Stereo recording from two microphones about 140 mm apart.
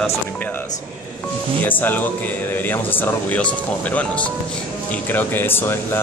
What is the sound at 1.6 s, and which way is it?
Speech, 15° left (ahead or behind).